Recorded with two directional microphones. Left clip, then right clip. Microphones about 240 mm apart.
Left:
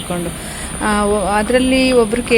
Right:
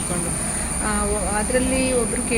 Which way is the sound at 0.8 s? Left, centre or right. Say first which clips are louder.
Left 10 dB; left.